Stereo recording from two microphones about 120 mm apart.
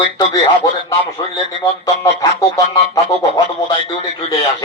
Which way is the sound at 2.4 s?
30° left (ahead or behind).